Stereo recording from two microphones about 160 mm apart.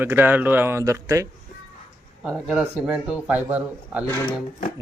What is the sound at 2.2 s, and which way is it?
A man's voice, 5° right (ahead or behind).